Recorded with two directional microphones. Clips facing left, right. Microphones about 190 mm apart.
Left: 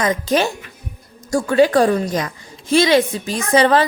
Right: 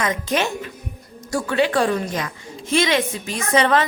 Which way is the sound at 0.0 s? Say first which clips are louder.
Left 4 dB; 35° left (ahead or behind).